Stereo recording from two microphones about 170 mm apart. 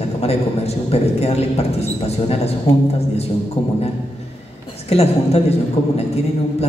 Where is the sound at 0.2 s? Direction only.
35° left (ahead or behind).